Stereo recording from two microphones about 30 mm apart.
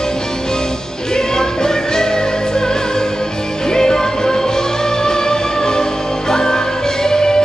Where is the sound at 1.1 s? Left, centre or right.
Left.